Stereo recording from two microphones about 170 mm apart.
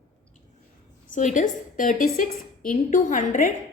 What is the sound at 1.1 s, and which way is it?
A woman's voice, 45° left (ahead or behind).